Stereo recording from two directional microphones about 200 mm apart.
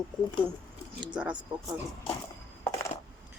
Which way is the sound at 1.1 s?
5° right (ahead or behind).